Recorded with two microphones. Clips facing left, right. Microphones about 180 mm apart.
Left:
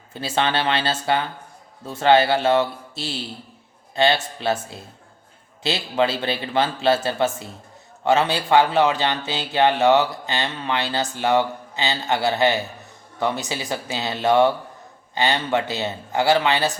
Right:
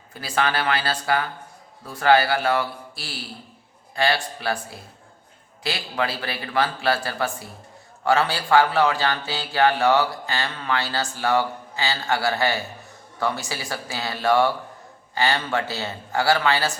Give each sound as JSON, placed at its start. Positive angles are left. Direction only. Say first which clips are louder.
{"t": 0.1, "sound": "speech", "louder": "left 2 dB", "side_deg": 25}